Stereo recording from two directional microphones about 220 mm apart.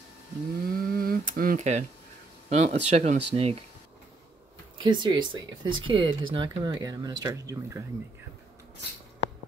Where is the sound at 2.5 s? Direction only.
30° right (ahead or behind).